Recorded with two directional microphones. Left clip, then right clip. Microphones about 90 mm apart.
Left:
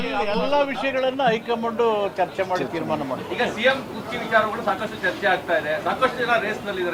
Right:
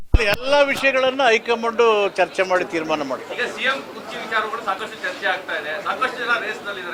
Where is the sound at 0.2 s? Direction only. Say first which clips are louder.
Right 5 dB; 20° right (ahead or behind).